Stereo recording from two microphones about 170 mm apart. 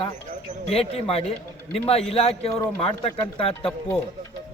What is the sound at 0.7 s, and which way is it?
Speech, 35° left (ahead or behind).